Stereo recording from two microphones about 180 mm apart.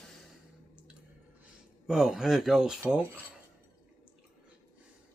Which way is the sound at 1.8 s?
Centre (ahead or behind).